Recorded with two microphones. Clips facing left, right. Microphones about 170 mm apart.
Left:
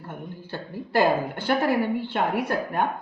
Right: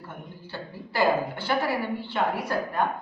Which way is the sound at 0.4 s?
50° left (ahead or behind).